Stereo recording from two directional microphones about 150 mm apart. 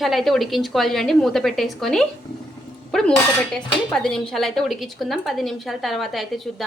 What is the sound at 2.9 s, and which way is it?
Dishes, 5° left (ahead or behind).